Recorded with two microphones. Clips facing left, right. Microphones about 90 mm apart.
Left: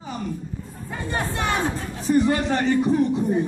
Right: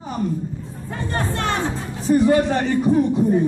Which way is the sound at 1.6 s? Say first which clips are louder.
Right 2 dB; 15° right (ahead or behind).